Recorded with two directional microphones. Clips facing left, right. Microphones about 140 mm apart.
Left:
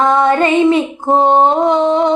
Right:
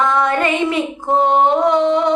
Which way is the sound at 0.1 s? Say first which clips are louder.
Left 5 dB; 30° left (ahead or behind).